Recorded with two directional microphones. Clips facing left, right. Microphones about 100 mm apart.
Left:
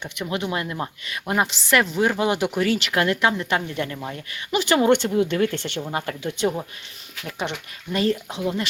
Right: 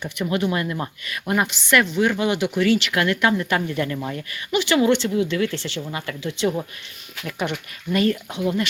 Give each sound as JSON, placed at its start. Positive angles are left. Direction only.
{"t": 0.0, "sound": "speech", "side_deg": 20}
{"t": 1.5, "sound": "speech", "side_deg": 30}
{"t": 3.8, "sound": "speech", "side_deg": 10}
{"t": 4.5, "sound": "speech", "side_deg": 40}
{"t": 5.8, "sound": "speech", "side_deg": 40}
{"t": 7.3, "sound": "speech", "side_deg": 25}